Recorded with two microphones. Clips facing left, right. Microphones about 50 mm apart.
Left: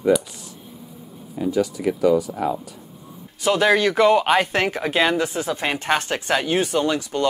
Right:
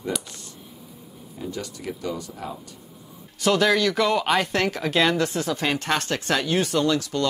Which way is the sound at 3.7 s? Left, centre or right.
Left.